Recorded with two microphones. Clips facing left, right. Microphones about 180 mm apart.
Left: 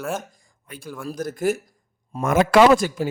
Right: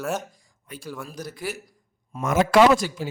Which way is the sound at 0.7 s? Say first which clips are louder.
Left 3 dB; 60° left (ahead or behind).